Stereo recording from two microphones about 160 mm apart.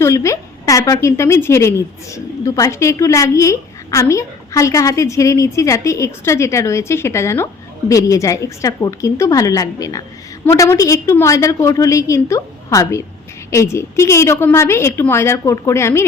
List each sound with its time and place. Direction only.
0.0 s a woman's voice: 20° left (ahead or behind)